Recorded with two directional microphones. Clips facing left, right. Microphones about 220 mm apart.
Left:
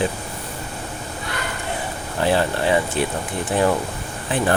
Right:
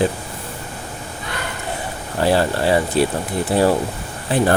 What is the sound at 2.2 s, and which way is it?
Speech, 35° right (ahead or behind).